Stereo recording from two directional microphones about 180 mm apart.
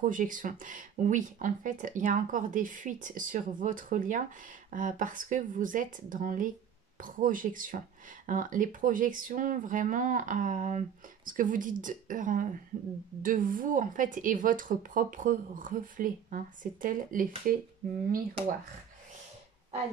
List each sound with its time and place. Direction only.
0.0 s speech: 45° right (ahead or behind)